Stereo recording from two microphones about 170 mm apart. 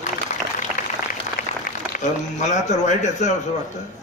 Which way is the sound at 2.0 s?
45° left (ahead or behind).